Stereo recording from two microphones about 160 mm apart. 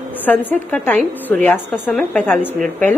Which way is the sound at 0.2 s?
10° left (ahead or behind).